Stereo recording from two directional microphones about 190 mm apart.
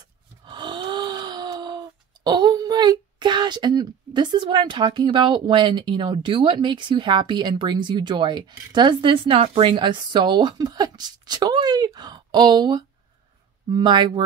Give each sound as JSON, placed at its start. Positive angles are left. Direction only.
{"t": 0.5, "sound": "speech", "side_deg": -25}